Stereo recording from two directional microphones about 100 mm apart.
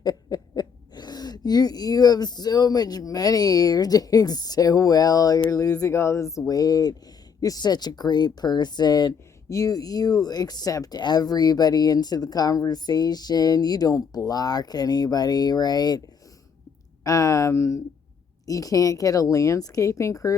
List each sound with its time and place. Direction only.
0.0 s speech: 45° left (ahead or behind)
17.0 s speech: 35° left (ahead or behind)